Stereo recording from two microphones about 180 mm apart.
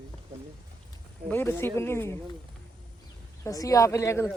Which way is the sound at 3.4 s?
20° left (ahead or behind).